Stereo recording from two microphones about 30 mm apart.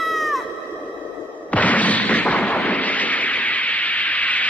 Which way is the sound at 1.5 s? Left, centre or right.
Left.